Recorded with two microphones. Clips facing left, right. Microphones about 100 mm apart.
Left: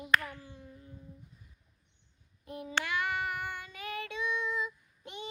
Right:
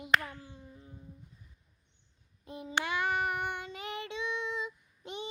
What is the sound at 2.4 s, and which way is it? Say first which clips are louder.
Child singing: right 1 dB; 20° right (ahead or behind).